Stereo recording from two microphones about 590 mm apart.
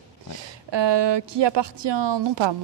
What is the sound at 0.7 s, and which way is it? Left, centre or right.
A woman's voice, right.